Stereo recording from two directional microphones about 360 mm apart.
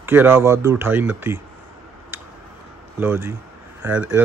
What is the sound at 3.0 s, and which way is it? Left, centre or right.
Speech, centre.